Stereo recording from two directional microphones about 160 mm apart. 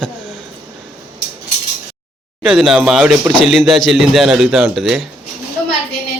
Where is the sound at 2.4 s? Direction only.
Centre (ahead or behind).